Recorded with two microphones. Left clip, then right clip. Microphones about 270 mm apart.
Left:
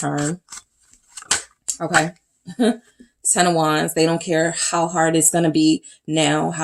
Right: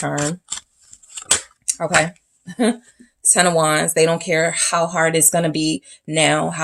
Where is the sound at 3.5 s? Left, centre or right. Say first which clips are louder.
Right 2 dB; right.